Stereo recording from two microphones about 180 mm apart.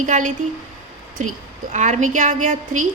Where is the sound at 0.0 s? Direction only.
45° right (ahead or behind).